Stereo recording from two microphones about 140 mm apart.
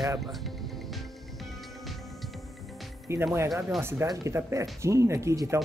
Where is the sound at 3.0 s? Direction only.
20° right (ahead or behind).